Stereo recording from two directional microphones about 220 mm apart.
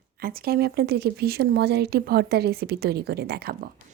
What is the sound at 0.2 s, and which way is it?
Speech, 40° right (ahead or behind).